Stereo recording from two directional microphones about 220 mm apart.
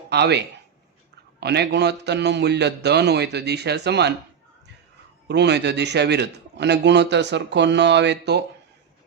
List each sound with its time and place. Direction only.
0.1 s a man's voice: 50° right (ahead or behind)
5.3 s a man's voice: 50° right (ahead or behind)